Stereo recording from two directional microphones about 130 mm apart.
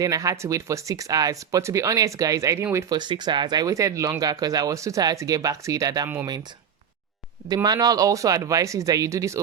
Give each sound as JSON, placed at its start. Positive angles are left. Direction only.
{"t": 0.0, "sound": "speech", "side_deg": -25}
{"t": 7.4, "sound": "speech", "side_deg": -30}